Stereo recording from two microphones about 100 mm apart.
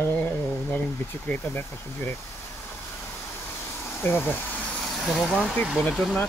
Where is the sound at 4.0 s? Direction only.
20° left (ahead or behind).